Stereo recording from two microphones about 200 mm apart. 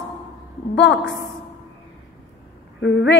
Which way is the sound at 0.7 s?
60° left (ahead or behind).